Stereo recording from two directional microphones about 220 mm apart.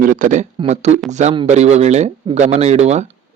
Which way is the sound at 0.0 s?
35° right (ahead or behind).